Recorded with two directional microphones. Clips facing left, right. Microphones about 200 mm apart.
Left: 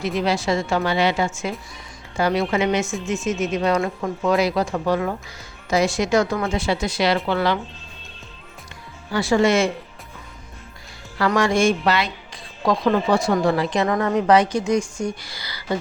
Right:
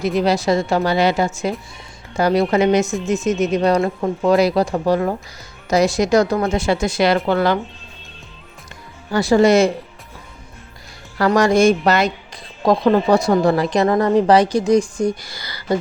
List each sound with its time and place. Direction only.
0.2 s speech: 40° right (ahead or behind)
9.1 s speech: 40° right (ahead or behind)
11.2 s speech: 40° right (ahead or behind)